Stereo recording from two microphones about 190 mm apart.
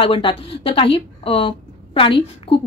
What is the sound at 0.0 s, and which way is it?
A woman's voice, 30° left (ahead or behind).